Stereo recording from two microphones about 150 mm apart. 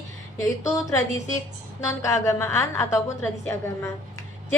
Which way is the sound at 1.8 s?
20° left (ahead or behind).